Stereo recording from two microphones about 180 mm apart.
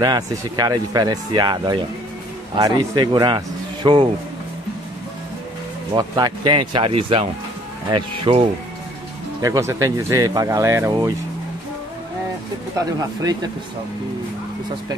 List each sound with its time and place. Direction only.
0.0 s speech: 20° right (ahead or behind)
5.9 s speech: 25° right (ahead or behind)
9.4 s speech: 15° right (ahead or behind)
12.7 s speech: 20° right (ahead or behind)